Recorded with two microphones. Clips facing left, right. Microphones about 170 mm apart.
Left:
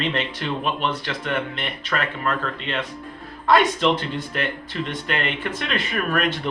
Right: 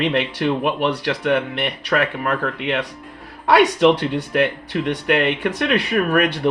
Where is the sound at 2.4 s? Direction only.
60° right (ahead or behind).